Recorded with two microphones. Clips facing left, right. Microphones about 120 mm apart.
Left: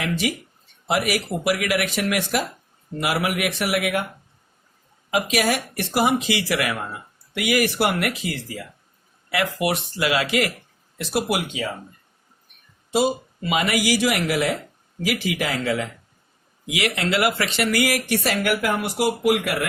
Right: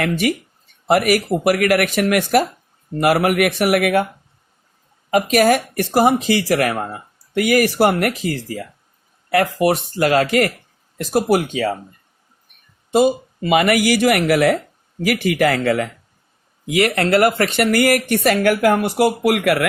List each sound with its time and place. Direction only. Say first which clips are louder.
0.0 s speech: right 6 dB; 55° right (ahead or behind)
5.1 s speech: right 7 dB; 45° right (ahead or behind)
12.9 s speech: right 6 dB; 50° right (ahead or behind)
19.2 s speech: right 4 dB; 70° right (ahead or behind)